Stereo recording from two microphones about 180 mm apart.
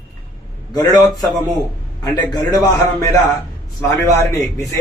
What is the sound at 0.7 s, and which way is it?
A man's voice, 20° left (ahead or behind).